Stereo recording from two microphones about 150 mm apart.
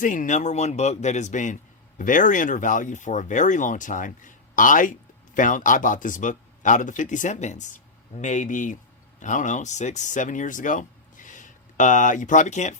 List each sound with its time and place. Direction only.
0.0 s speech: 60° left (ahead or behind)